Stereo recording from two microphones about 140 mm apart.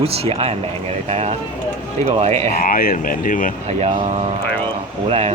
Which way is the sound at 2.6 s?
90° left.